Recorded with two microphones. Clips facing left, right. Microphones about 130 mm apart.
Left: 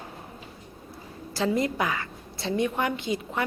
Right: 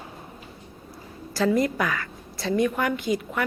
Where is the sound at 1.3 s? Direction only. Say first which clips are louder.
Right 3 dB; 25° left (ahead or behind).